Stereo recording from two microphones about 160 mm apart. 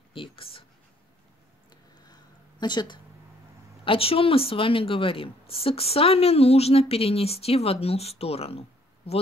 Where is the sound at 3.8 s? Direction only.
35° left (ahead or behind).